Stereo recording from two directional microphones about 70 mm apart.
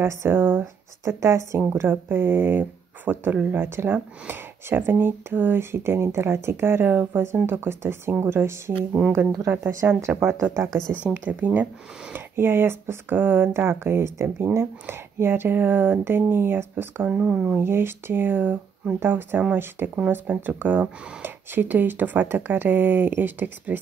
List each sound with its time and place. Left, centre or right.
0.0 s speech: right
1.0 s speech: right
9.8 s speech: right
17.1 s speech: centre
17.6 s speech: right